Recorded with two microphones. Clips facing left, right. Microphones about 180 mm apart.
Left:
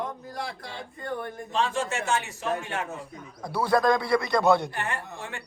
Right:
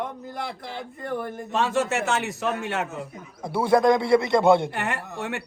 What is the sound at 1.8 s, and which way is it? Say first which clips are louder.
Speech: right 3 dB; 70° right (ahead or behind).